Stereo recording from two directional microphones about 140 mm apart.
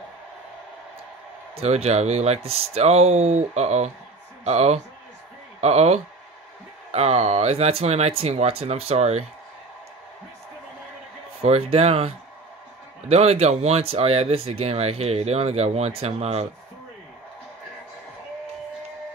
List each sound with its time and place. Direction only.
1.5 s speech: 45° right (ahead or behind)
11.4 s speech: 50° right (ahead or behind)